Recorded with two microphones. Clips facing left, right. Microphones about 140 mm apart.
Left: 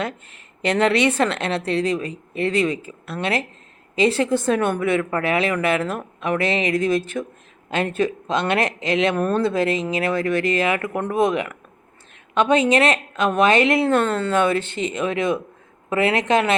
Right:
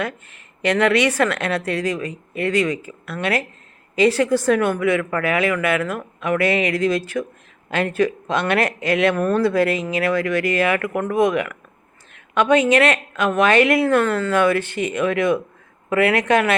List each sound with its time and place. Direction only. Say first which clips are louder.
0.6 s speech: right 1 dB; 30° left (ahead or behind)